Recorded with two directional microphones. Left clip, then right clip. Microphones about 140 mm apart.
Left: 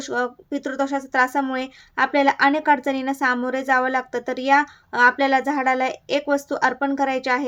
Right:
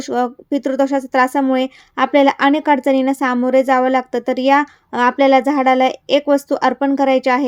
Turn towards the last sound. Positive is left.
turn(degrees=-50)  # may be behind; listen again after turning